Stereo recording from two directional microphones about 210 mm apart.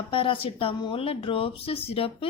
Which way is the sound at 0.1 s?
25° left (ahead or behind).